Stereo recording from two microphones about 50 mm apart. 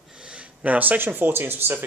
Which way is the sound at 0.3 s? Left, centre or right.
Right.